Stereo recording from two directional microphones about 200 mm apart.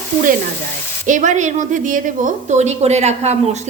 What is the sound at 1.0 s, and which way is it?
A woman's voice, 40° right (ahead or behind).